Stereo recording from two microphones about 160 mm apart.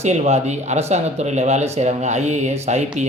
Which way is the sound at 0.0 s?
45° right (ahead or behind).